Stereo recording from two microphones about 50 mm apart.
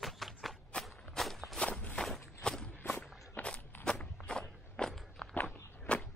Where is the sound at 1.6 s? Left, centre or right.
Left.